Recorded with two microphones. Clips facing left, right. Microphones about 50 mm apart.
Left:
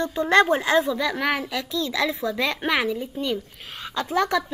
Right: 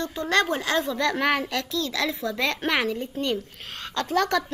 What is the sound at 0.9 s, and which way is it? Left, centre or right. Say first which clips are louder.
Speech: right 1 dB; centre.